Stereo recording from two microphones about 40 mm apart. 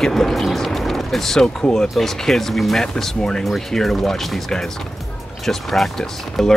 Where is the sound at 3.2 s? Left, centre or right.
Centre.